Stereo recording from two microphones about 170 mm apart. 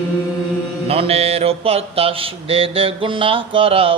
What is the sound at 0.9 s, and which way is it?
Mantra, 35° right (ahead or behind).